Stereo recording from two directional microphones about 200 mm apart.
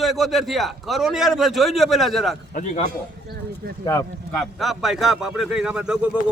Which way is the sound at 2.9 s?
50° right (ahead or behind).